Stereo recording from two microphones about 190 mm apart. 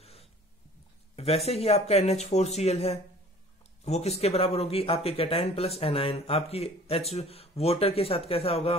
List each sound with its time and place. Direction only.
0.0 s dog: 30° left (ahead or behind)
1.1 s speech: 30° left (ahead or behind)